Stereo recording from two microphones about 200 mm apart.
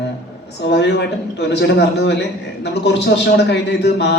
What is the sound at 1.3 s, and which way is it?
A man's voice, 55° left (ahead or behind).